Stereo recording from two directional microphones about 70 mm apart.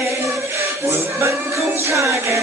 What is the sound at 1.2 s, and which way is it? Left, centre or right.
Chant, right.